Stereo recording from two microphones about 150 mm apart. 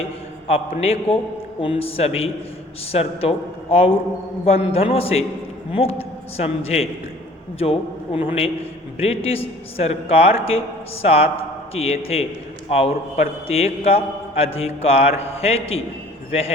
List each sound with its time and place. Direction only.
0.0 s a sound: 40° left (ahead or behind)
0.8 s mantra: 40° left (ahead or behind)
6.3 s a man's voice: 45° left (ahead or behind)
7.6 s mantra: 40° left (ahead or behind)
11.0 s a man's voice: 40° left (ahead or behind)
11.7 s mantra: 40° left (ahead or behind)
12.6 s a man's voice: 40° left (ahead or behind)
13.5 s mantra: 40° left (ahead or behind)